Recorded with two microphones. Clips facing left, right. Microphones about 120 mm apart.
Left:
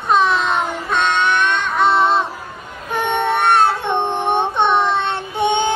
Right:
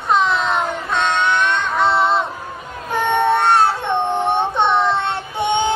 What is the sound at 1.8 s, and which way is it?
Child singing, 20° left (ahead or behind).